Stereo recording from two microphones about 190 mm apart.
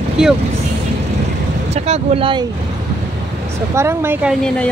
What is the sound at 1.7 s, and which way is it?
Speech, 35° right (ahead or behind).